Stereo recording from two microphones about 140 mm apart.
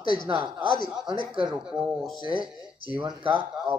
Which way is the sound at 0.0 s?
35° left (ahead or behind).